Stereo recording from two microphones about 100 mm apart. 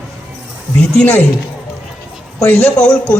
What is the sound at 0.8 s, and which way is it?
Speech, 15° left (ahead or behind).